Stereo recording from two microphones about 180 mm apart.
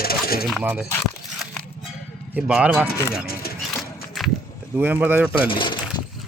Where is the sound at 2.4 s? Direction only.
5° right (ahead or behind).